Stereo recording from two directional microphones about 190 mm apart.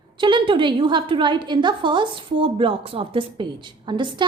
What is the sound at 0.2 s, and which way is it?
A woman's voice, 25° right (ahead or behind).